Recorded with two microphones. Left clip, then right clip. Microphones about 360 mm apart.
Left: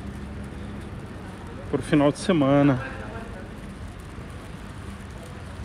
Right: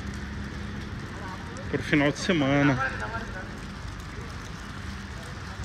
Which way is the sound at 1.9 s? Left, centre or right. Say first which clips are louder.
Left 3 dB; centre.